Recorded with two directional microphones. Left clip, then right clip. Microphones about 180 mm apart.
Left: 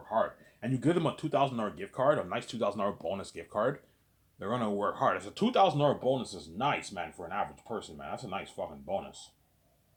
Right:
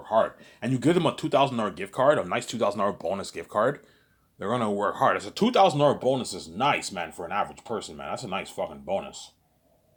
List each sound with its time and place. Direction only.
0.1 s speech: 50° right (ahead or behind)